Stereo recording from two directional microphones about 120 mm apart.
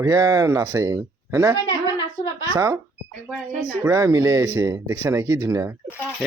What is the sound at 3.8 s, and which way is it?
Speech, 25° right (ahead or behind).